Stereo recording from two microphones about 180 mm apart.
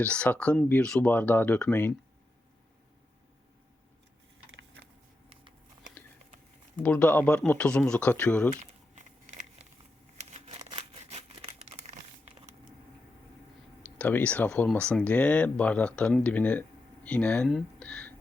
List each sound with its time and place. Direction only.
0.0 s speech: 5° left (ahead or behind)
6.8 s speech: 5° left (ahead or behind)
9.0 s a sound: 40° right (ahead or behind)
11.6 s crumpling: 35° right (ahead or behind)
14.0 s speech: 10° left (ahead or behind)